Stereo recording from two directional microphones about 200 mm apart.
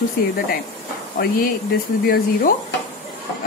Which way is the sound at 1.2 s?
50° left (ahead or behind).